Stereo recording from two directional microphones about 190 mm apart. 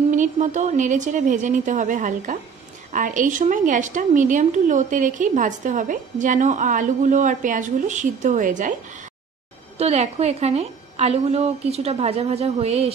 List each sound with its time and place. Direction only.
0.1 s a woman's voice: 40° right (ahead or behind)
9.8 s a woman's voice: 35° right (ahead or behind)